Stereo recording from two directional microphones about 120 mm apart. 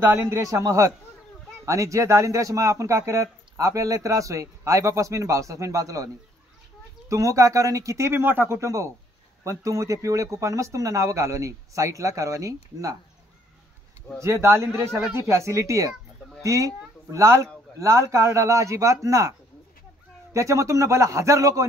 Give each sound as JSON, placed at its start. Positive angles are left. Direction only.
{"t": 0.0, "sound": "speech", "side_deg": -15}
{"t": 7.1, "sound": "speech", "side_deg": -25}
{"t": 14.2, "sound": "speech", "side_deg": -20}
{"t": 20.3, "sound": "speech", "side_deg": -25}